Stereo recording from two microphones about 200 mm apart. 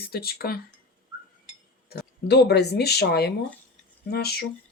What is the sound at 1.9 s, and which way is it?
Speech, 55° left (ahead or behind).